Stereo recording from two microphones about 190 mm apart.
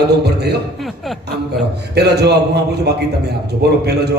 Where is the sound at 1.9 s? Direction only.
60° right (ahead or behind).